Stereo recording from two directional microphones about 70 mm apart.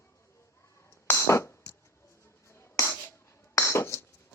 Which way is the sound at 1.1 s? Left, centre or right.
Left.